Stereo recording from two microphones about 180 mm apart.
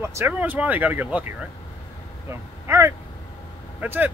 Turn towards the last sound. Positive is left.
turn(degrees=-10)  # may be behind; listen again after turning